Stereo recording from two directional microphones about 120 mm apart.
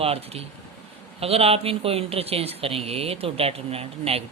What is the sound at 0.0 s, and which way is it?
Speech, 55° right (ahead or behind).